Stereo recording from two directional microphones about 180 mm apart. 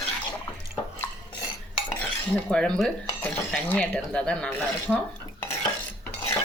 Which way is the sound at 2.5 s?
5° left (ahead or behind).